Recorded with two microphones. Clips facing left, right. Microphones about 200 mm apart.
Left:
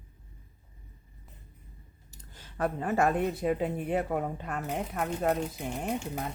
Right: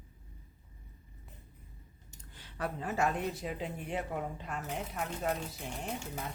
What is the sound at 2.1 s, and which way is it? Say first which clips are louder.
Speech: left 7 dB; 45° left (ahead or behind).